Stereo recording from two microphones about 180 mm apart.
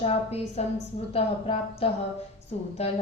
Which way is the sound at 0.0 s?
35° left (ahead or behind).